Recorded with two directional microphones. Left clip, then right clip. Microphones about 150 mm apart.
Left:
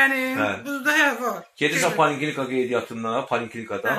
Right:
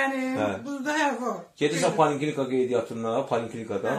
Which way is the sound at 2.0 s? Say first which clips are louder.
Left 2 dB; 10° left (ahead or behind).